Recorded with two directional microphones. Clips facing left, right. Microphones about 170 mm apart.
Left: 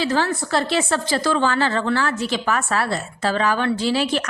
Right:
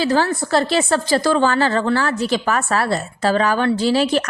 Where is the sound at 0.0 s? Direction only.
40° right (ahead or behind).